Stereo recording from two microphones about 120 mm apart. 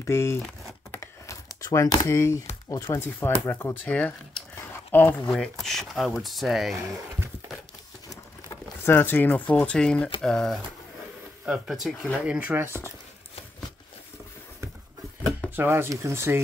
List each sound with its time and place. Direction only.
0.0 s speech: 20° left (ahead or behind)
0.9 s typing: 25° left (ahead or behind)
2.9 s speech: 20° left (ahead or behind)
4.6 s a sound: 15° left (ahead or behind)
5.3 s speech: 5° left (ahead or behind)
8.1 s a sound: 20° left (ahead or behind)
10.2 s speech: 5° left (ahead or behind)
11.4 s speech: 5° right (ahead or behind)
15.5 s speech: 20° right (ahead or behind)